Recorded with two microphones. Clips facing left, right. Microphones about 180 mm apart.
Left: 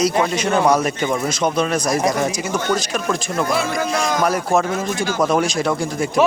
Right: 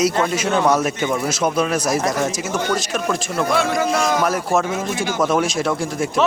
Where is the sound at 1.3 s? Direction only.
5° right (ahead or behind).